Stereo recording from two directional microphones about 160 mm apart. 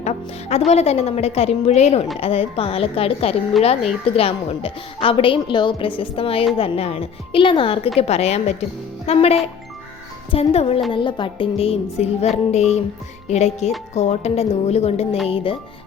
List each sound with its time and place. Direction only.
0.0 s a woman's voice: 45° left (ahead or behind)